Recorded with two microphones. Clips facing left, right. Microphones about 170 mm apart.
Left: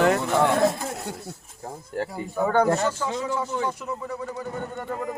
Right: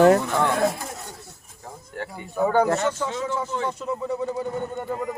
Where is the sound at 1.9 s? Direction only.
35° left (ahead or behind).